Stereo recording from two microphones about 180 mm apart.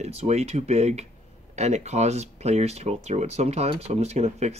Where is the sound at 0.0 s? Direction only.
35° right (ahead or behind).